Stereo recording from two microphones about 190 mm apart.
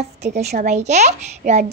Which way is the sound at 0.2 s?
35° right (ahead or behind).